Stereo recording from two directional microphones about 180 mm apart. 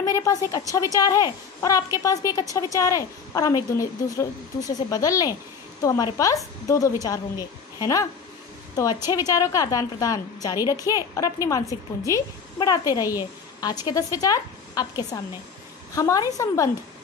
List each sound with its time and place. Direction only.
0.0 s a woman's voice: 20° left (ahead or behind)